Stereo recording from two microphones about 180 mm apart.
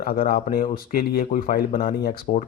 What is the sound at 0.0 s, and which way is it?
Speech, 55° left (ahead or behind).